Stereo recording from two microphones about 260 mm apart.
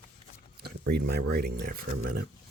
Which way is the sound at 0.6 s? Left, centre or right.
Right.